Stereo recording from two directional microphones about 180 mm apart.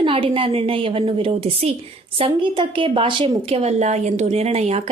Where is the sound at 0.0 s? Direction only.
30° right (ahead or behind).